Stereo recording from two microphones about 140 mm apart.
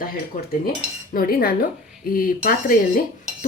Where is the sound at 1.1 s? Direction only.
90° left.